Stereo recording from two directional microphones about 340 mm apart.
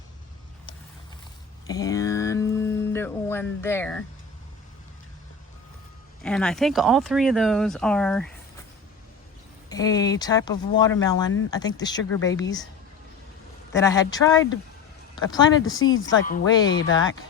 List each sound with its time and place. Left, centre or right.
1.6 s a sound: centre
6.2 s speech: centre
9.6 s speech: centre
13.7 s speech: centre
15.8 s speech: left
16.4 s speech: centre